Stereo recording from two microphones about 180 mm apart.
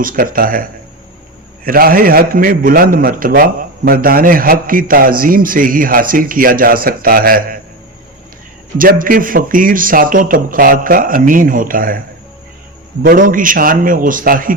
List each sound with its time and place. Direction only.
0.0 s a man's voice: 50° right (ahead or behind)
1.6 s a man's voice: 55° right (ahead or behind)
8.8 s a man's voice: 50° right (ahead or behind)